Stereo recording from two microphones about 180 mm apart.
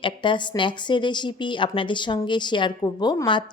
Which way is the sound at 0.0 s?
25° left (ahead or behind).